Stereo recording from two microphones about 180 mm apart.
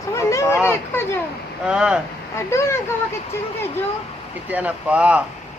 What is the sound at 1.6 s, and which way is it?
Speech, 5° right (ahead or behind).